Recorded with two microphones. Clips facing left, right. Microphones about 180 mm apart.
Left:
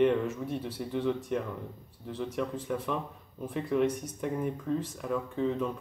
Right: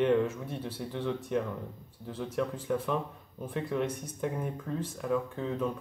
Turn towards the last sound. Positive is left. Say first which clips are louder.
# left 2 dB
turn(degrees=0)  # may be behind; listen again after turning